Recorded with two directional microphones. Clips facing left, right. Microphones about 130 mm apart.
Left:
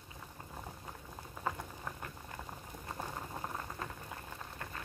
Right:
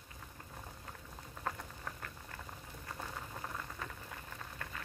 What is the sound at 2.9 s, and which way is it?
Boiling, 25° left (ahead or behind).